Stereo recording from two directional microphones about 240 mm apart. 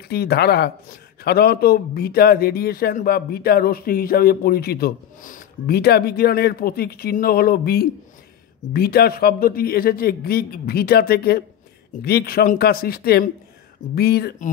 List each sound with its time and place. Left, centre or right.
0.1 s a man's voice: left